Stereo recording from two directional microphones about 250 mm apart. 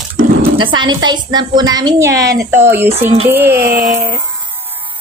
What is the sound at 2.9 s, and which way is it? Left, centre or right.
Speech, right.